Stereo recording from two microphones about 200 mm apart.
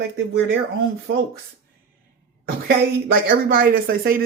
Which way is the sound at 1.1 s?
75° right (ahead or behind).